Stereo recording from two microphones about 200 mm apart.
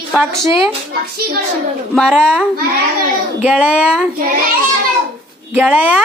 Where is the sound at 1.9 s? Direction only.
Centre (ahead or behind).